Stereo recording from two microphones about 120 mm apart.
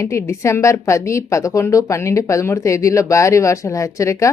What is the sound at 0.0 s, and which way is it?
Speech, 25° left (ahead or behind).